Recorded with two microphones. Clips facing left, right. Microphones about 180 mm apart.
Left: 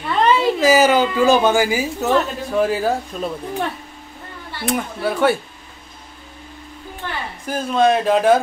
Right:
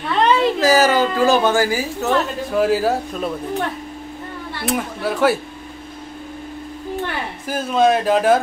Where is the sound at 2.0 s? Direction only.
Centre (ahead or behind).